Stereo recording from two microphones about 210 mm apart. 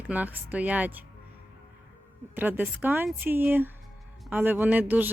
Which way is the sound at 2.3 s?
10° right (ahead or behind).